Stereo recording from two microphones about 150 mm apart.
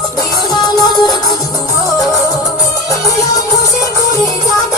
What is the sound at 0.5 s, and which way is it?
Music, 30° left (ahead or behind).